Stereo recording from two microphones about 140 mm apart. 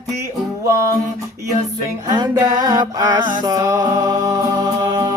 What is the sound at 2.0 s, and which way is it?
Music, 30° right (ahead or behind).